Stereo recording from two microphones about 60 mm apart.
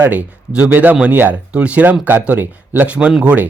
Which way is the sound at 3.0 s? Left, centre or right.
Centre.